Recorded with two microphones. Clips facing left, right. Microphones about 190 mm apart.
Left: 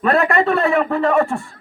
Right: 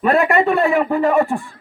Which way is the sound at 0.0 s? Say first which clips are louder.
Right 1 dB; 15° right (ahead or behind).